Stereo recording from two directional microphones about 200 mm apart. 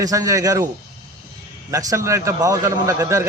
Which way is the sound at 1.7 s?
15° right (ahead or behind).